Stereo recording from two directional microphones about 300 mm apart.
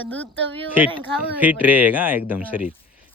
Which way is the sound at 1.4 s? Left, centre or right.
Centre.